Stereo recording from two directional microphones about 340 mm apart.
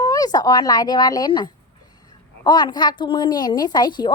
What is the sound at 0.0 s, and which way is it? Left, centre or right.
A woman's voice, centre.